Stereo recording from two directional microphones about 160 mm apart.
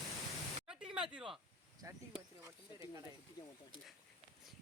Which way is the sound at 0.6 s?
5° right (ahead or behind).